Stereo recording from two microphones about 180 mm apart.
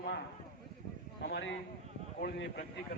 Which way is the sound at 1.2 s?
80° left.